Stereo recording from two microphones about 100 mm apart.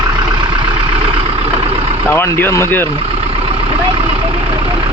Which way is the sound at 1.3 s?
75° right (ahead or behind).